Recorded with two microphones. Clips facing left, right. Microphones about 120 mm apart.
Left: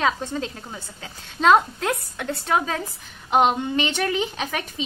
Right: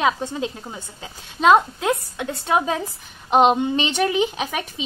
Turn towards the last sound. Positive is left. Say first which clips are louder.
# right 2 dB
turn(degrees=-15)  # may be behind; listen again after turning